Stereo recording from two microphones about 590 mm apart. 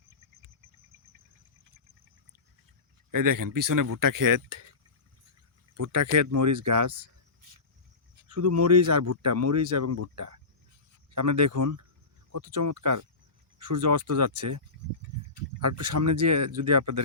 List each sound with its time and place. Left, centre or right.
3.1 s speech: right
5.7 s speech: right
8.3 s speech: right